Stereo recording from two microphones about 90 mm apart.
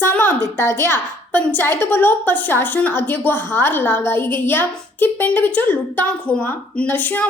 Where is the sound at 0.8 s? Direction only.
25° left (ahead or behind).